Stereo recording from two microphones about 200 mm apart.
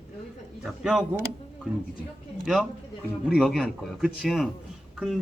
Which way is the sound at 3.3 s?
Centre (ahead or behind).